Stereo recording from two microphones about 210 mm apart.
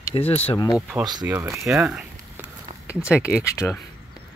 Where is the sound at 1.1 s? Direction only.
15° right (ahead or behind).